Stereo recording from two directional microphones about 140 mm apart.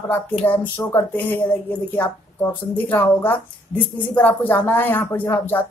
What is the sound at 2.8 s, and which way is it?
Speech, 10° left (ahead or behind).